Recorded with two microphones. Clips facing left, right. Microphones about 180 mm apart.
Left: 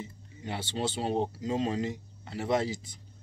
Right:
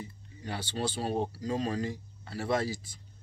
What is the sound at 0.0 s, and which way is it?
Speech, 20° left (ahead or behind).